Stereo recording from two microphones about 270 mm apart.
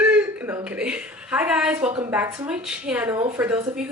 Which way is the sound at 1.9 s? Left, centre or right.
Centre.